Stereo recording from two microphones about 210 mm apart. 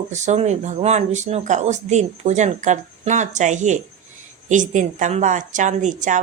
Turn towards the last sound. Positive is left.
turn(degrees=-35)  # may be behind; listen again after turning